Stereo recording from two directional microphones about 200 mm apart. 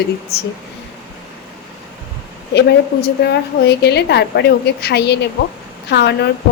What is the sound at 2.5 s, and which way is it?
A woman's voice, 55° left (ahead or behind).